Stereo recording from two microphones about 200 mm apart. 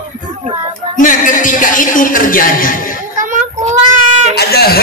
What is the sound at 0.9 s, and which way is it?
A man's voice, 40° left (ahead or behind).